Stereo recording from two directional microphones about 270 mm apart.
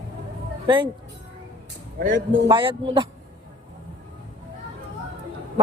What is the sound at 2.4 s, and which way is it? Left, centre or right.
Speech, centre.